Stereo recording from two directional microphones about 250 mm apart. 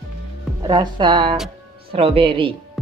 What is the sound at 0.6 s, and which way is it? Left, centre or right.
A woman's voice, centre.